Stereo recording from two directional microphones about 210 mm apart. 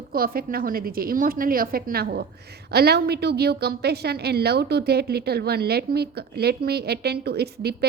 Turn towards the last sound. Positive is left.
turn(degrees=-50)  # may be behind; listen again after turning